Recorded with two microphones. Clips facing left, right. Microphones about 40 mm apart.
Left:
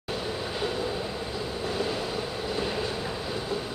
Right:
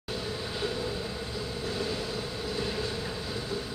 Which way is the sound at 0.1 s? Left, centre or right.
Centre.